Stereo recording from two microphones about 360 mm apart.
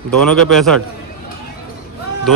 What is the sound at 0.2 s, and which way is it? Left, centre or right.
Speech, centre.